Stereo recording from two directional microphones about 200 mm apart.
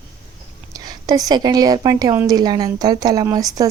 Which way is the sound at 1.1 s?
20° right (ahead or behind).